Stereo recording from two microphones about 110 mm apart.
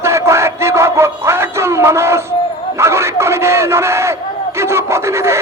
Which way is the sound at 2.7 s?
25° right (ahead or behind).